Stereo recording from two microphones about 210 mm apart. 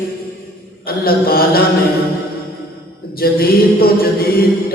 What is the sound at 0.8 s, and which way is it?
Mantra, 45° left (ahead or behind).